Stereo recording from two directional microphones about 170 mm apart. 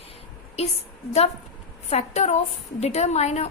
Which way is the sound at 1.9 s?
40° left (ahead or behind).